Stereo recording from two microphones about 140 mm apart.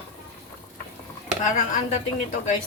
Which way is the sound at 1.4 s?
65° left (ahead or behind).